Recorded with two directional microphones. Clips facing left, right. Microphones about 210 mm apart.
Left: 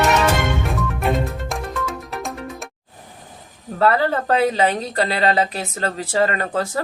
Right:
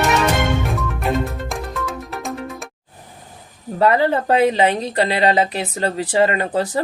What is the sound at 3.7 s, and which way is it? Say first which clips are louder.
Speech: right 2 dB; 15° right (ahead or behind).